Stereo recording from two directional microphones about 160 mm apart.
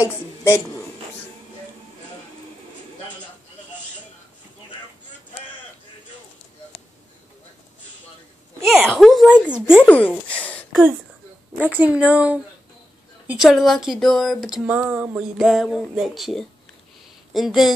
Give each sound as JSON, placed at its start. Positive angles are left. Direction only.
{"t": 0.0, "sound": "a woman's voice", "side_deg": 15}
{"t": 8.6, "sound": "a sound", "side_deg": 0}
{"t": 11.5, "sound": "a woman's voice", "side_deg": -10}